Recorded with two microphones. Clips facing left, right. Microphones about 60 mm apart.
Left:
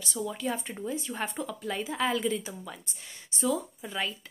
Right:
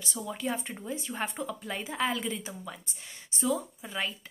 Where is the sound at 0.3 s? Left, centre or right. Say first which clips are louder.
Even; centre.